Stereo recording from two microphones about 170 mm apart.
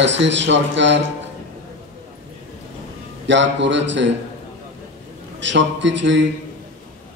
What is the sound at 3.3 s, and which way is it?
Speech, 90° right.